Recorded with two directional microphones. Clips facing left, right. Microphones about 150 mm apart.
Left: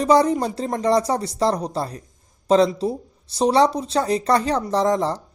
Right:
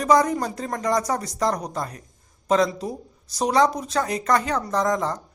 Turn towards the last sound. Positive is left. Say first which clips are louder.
# left 3 dB
turn(degrees=30)  # may be behind; listen again after turning